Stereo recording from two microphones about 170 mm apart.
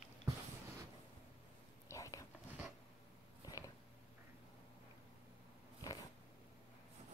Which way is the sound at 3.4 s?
20° left (ahead or behind).